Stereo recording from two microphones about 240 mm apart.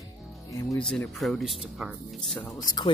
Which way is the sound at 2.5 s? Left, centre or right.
Centre.